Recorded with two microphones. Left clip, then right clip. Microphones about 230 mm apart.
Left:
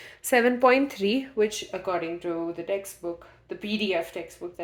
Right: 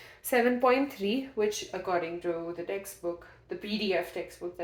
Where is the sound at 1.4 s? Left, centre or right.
Left.